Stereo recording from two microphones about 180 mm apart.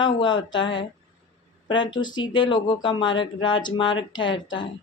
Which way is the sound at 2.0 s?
25° left (ahead or behind).